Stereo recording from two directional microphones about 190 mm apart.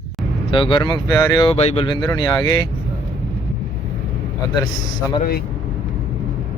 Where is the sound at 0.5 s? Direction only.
25° left (ahead or behind).